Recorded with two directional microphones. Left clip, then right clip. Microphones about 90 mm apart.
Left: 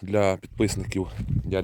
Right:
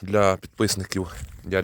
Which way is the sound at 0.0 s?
30° left (ahead or behind).